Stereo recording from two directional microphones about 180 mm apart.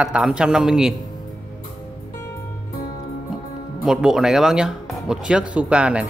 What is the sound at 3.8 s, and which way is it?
Speech, 5° right (ahead or behind).